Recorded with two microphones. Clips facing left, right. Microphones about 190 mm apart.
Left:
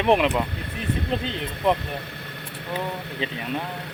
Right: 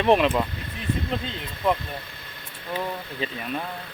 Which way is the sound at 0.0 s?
15° left (ahead or behind).